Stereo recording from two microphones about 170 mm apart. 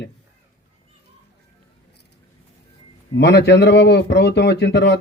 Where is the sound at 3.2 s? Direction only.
90° left.